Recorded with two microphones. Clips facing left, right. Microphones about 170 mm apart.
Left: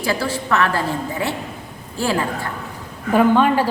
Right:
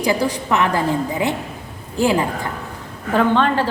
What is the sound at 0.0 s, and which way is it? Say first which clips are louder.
A woman's voice: right 3 dB; 15° right (ahead or behind).